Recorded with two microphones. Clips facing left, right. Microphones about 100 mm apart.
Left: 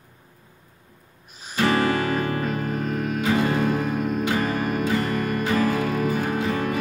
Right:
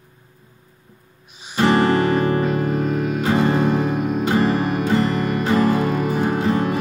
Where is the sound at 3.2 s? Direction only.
30° right (ahead or behind).